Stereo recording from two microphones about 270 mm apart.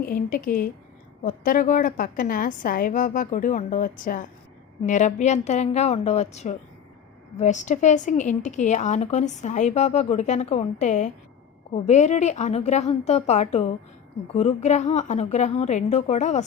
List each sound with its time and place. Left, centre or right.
0.0 s a woman's voice: left